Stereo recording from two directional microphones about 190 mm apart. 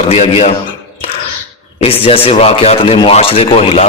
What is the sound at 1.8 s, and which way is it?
A man's voice, 30° left (ahead or behind).